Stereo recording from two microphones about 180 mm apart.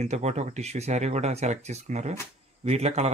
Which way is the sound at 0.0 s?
40° right (ahead or behind).